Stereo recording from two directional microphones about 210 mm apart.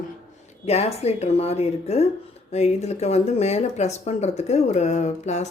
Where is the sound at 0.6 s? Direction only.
30° left (ahead or behind).